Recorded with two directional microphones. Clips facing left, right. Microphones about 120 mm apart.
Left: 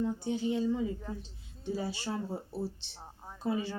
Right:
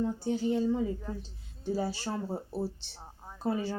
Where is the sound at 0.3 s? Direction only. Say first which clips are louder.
Right 4 dB; 40° right (ahead or behind).